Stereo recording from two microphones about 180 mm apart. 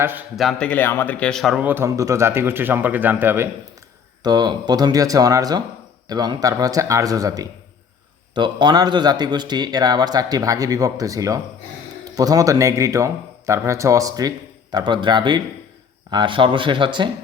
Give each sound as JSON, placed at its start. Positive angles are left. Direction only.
{"t": 0.0, "sound": "speech", "side_deg": -10}
{"t": 0.3, "sound": "speech", "side_deg": 5}
{"t": 4.2, "sound": "speech", "side_deg": -25}